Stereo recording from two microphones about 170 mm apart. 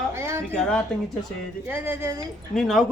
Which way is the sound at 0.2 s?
15° right (ahead or behind).